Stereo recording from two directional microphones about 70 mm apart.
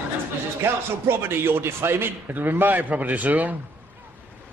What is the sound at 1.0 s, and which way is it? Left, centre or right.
A man's voice, right.